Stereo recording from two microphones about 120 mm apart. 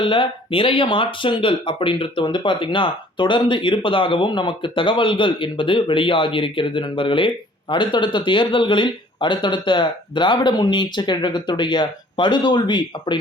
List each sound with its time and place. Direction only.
0.0 s speech: 45° left (ahead or behind)